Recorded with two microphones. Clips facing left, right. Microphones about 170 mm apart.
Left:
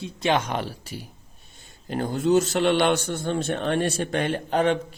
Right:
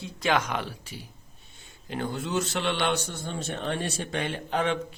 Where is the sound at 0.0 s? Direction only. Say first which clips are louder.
Left 3 dB; 25° left (ahead or behind).